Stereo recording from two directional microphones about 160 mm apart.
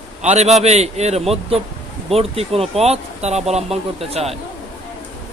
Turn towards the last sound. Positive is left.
turn(degrees=-40)  # may be behind; listen again after turning